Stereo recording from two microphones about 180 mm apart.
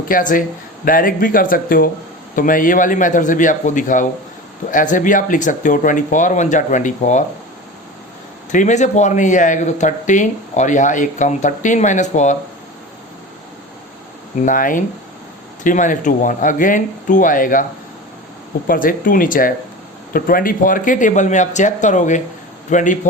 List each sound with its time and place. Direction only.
0.1 s speech: 50° left (ahead or behind)
8.5 s speech: 40° left (ahead or behind)
14.4 s speech: 45° left (ahead or behind)
18.7 s speech: 50° left (ahead or behind)